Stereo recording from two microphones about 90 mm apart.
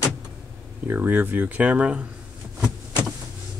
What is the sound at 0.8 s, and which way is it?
Speech, 20° right (ahead or behind).